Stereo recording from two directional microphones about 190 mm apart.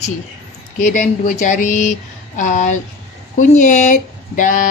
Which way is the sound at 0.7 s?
40° left (ahead or behind).